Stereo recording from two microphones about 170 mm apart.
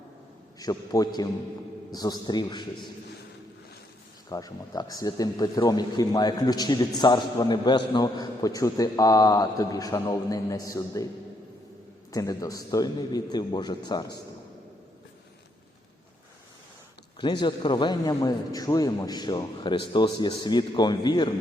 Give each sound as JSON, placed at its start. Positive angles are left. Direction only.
{"t": 0.6, "sound": "a man's voice", "side_deg": 20}
{"t": 4.3, "sound": "a man's voice", "side_deg": 20}
{"t": 12.1, "sound": "a man's voice", "side_deg": 20}
{"t": 17.2, "sound": "a man's voice", "side_deg": 25}